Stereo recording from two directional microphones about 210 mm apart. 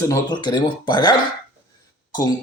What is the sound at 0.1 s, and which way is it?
Speech, 20° left (ahead or behind).